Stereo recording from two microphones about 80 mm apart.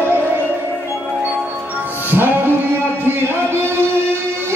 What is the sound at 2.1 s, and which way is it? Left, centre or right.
Music, right.